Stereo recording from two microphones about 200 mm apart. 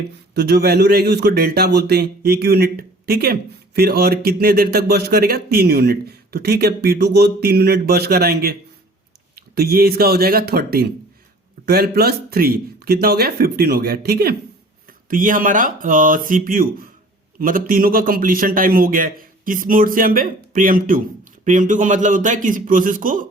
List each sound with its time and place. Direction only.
0.3 s a man's voice: 55° right (ahead or behind)